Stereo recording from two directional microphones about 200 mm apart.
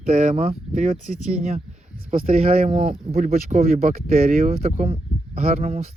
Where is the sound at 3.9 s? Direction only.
45° right (ahead or behind).